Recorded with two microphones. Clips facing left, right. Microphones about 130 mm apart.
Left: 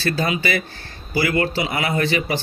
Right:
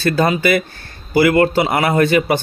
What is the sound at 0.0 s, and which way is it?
Speech, 50° right (ahead or behind).